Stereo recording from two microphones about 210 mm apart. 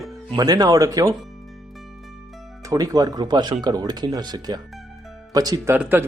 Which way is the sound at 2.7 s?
15° right (ahead or behind).